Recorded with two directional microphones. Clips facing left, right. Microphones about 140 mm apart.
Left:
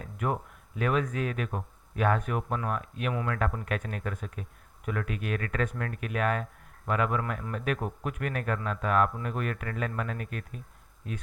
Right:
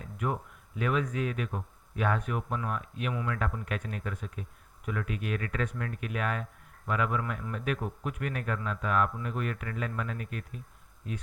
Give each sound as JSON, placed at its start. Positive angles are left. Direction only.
{"t": 0.2, "sound": "speech", "side_deg": 50}